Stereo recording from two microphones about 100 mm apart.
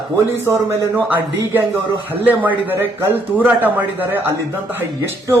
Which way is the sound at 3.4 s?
15° right (ahead or behind).